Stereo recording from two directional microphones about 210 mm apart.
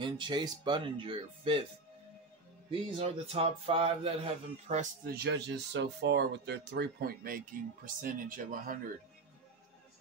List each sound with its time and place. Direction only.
0.0 s a man's voice: 20° right (ahead or behind)
3.0 s a man's voice: 30° right (ahead or behind)
5.1 s speech: 55° right (ahead or behind)